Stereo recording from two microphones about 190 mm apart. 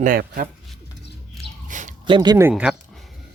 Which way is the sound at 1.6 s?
40° right (ahead or behind).